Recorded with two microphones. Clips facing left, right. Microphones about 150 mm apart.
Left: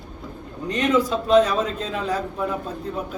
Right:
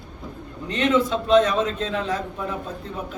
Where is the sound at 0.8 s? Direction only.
5° left (ahead or behind).